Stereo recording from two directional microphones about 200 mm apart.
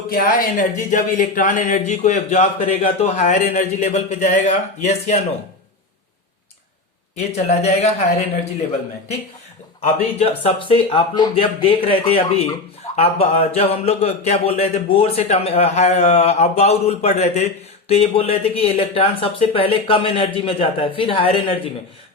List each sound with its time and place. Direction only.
0.1 s a man's voice: 45° left (ahead or behind)
7.4 s a man's voice: 30° left (ahead or behind)
10.2 s a man's voice: 30° left (ahead or behind)